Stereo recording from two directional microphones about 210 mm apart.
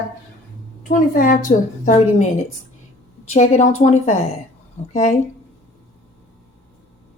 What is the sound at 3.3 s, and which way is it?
A woman's voice, 30° left (ahead or behind).